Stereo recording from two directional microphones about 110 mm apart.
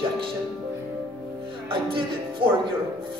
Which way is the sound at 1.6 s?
50° right (ahead or behind).